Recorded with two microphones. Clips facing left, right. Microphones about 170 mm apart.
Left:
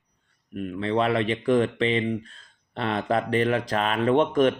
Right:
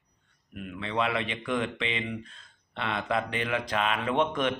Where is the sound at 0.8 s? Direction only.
35° left (ahead or behind).